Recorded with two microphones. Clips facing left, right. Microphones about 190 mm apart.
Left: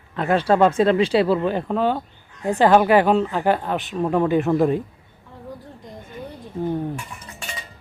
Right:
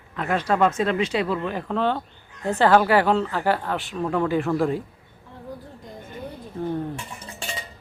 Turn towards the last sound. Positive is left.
turn(degrees=-30)  # may be behind; listen again after turning